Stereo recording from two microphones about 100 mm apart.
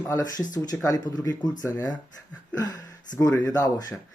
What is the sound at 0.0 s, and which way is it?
Speech, 35° left (ahead or behind).